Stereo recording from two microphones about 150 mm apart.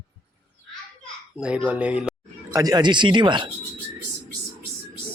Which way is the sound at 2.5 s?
25° right (ahead or behind).